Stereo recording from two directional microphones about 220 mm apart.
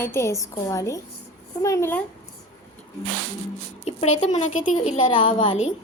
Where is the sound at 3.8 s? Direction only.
30° left (ahead or behind).